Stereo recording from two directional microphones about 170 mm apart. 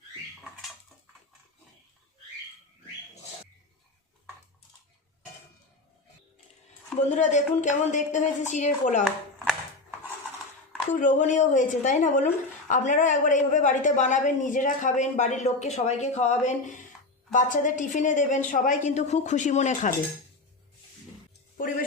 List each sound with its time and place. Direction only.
7.1 s a woman's voice: 45° left (ahead or behind)
10.9 s a woman's voice: 50° left (ahead or behind)